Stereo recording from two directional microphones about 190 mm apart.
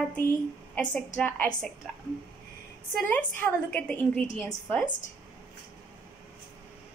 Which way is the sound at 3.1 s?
5° left (ahead or behind).